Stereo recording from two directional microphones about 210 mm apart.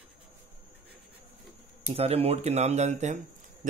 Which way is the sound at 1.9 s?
30° right (ahead or behind).